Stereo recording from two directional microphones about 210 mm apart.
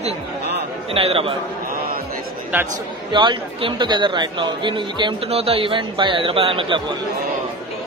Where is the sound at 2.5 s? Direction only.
10° right (ahead or behind).